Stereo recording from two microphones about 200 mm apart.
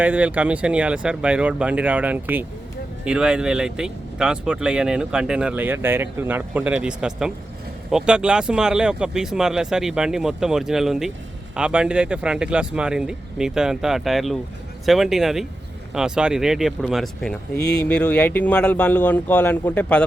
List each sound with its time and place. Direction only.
0.0 s speech: 5° right (ahead or behind)
17.6 s speech: 55° left (ahead or behind)
17.8 s a man's voice: 5° left (ahead or behind)